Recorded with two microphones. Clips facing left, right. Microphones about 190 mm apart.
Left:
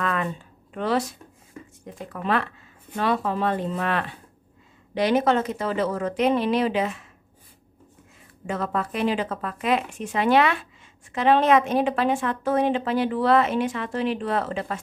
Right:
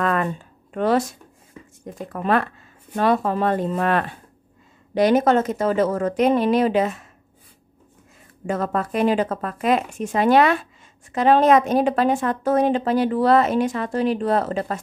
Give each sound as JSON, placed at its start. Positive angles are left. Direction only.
{"t": 0.0, "sound": "a sound", "side_deg": -50}
{"t": 0.7, "sound": "speech", "side_deg": -45}
{"t": 8.5, "sound": "speech", "side_deg": -45}